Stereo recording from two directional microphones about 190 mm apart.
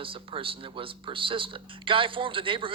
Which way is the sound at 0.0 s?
30° right (ahead or behind).